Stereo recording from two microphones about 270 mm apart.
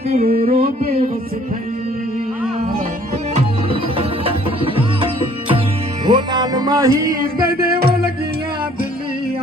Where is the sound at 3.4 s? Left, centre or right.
Right.